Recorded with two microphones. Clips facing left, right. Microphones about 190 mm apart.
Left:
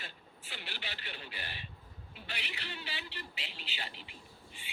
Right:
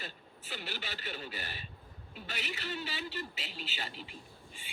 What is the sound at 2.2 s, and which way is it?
A woman's voice, 45° right (ahead or behind).